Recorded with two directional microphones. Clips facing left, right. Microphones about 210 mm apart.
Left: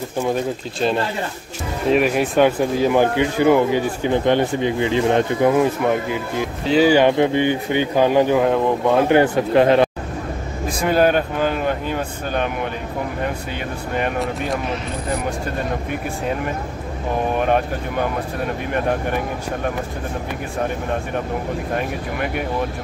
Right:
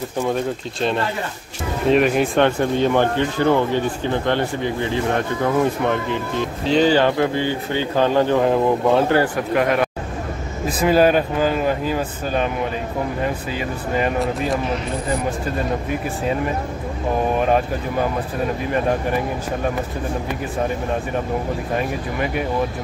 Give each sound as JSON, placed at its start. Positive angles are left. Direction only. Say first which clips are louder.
{"t": 1.9, "sound": "speech", "louder": "right 1 dB", "side_deg": 0}
{"t": 5.9, "sound": "speech", "louder": "left 1 dB", "side_deg": 10}
{"t": 9.1, "sound": "speech", "louder": "left 4 dB", "side_deg": 20}
{"t": 10.8, "sound": "speech", "louder": "right 1 dB", "side_deg": 0}
{"t": 13.9, "sound": "speech", "louder": "right 2 dB", "side_deg": 0}
{"t": 17.4, "sound": "speech", "louder": "right 1 dB", "side_deg": 0}